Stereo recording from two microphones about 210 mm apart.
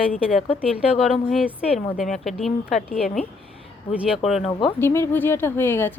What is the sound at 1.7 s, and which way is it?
Speech, 30° left (ahead or behind).